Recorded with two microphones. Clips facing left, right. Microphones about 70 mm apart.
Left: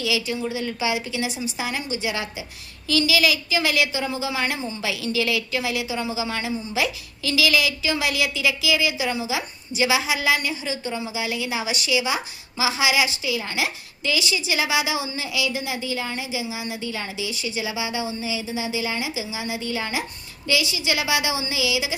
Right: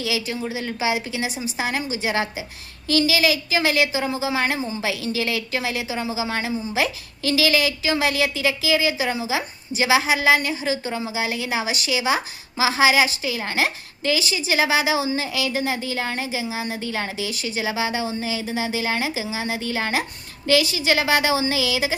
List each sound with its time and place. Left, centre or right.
0.0 s speech: right